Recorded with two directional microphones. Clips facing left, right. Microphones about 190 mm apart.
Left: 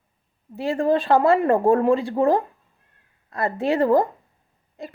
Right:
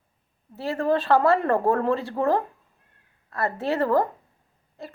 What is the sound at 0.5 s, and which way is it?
Speech, 15° left (ahead or behind).